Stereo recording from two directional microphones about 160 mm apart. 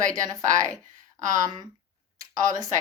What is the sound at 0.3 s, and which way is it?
Speech, 20° right (ahead or behind).